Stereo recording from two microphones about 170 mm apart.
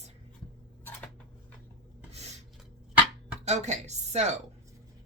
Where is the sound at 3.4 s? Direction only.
40° right (ahead or behind).